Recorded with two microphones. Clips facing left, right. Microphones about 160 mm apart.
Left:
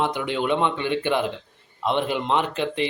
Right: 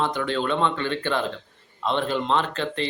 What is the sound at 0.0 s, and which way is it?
A man's voice, 15° left (ahead or behind).